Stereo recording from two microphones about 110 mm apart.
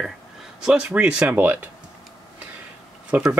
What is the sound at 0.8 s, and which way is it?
Speech, 15° right (ahead or behind).